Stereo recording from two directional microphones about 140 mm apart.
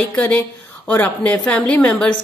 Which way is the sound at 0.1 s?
10° left (ahead or behind).